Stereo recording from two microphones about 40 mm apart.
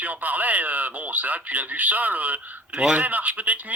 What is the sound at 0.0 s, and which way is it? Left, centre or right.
Speech, right.